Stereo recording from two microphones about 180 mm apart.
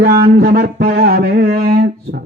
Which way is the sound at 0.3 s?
60° right (ahead or behind).